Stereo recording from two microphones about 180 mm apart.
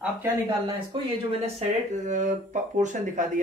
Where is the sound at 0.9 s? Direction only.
35° right (ahead or behind).